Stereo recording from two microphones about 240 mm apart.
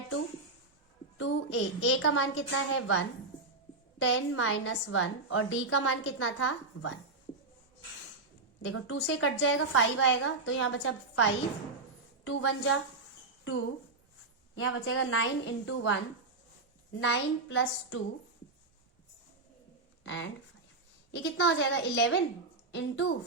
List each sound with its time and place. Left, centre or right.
1.2 s a woman's voice: left
8.6 s a woman's voice: left
14.5 s a woman's voice: left
20.1 s a woman's voice: left